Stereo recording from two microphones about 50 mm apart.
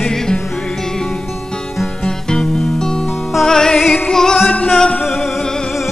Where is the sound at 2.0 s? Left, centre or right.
Centre.